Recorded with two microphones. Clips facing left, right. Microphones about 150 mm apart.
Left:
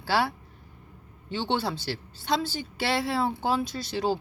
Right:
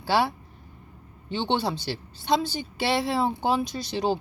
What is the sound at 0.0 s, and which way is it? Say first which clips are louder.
Speech: right 2 dB; 15° right (ahead or behind).